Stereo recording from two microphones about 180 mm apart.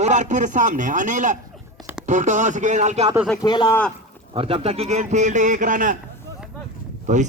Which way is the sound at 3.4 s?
25° left (ahead or behind).